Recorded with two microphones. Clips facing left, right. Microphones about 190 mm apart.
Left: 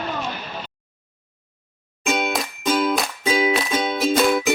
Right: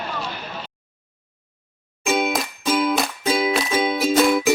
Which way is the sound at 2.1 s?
5° right (ahead or behind).